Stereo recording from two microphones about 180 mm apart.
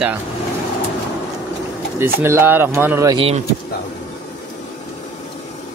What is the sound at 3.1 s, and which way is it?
Speech, 30° right (ahead or behind).